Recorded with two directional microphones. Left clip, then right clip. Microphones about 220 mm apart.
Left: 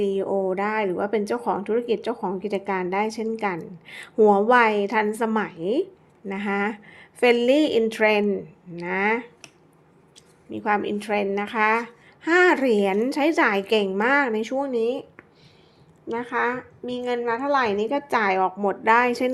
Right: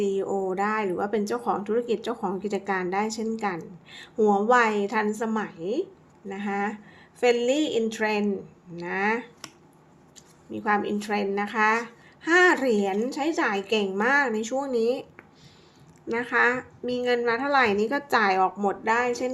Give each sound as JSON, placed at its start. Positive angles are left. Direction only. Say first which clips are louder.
{"t": 0.0, "sound": "a woman's voice", "louder": "left 3 dB", "side_deg": 15}
{"t": 10.5, "sound": "a woman's voice", "louder": "left 2 dB", "side_deg": 15}
{"t": 16.1, "sound": "speech", "louder": "right 2 dB", "side_deg": 10}